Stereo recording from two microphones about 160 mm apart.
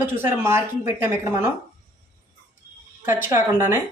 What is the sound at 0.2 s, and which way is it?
Speech, 15° right (ahead or behind).